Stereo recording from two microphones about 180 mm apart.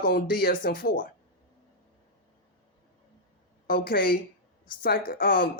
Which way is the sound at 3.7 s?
55° left (ahead or behind).